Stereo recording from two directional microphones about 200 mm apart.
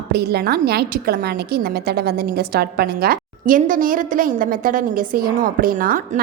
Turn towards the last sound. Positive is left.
turn(degrees=-45)  # may be behind; listen again after turning